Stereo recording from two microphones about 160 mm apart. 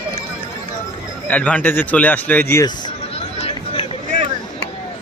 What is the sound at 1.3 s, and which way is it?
Speech, 10° left (ahead or behind).